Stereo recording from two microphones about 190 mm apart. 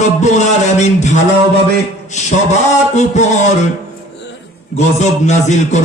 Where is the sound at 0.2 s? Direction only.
40° left (ahead or behind).